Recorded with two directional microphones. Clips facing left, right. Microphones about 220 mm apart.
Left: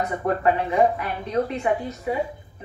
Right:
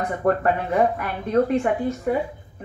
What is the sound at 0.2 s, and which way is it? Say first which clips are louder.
A woman's voice: right 2 dB; 55° right (ahead or behind).